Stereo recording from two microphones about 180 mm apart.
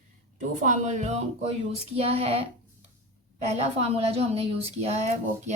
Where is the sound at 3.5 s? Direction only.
35° right (ahead or behind).